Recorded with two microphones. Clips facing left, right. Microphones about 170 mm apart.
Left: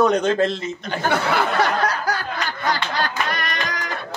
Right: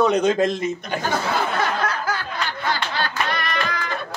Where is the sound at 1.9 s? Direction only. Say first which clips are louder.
Left 2 dB; 40° left (ahead or behind).